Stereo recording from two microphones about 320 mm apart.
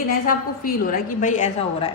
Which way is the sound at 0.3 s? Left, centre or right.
Left.